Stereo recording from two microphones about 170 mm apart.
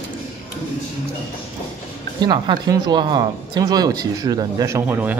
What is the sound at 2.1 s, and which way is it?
Speech, 25° right (ahead or behind).